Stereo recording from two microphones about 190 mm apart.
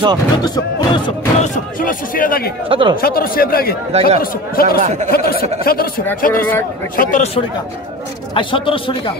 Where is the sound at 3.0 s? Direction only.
50° left (ahead or behind).